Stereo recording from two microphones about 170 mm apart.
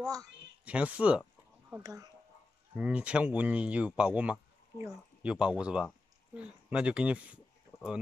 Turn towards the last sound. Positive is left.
turn(degrees=-5)  # may be behind; listen again after turning